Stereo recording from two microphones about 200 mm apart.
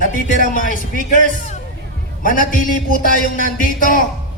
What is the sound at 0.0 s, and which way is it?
A man's voice, 40° left (ahead or behind).